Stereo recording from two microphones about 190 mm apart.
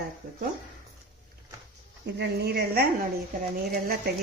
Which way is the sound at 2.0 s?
60° right (ahead or behind).